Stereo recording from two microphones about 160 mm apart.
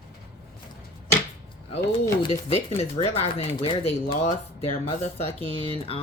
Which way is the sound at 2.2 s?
40° left (ahead or behind).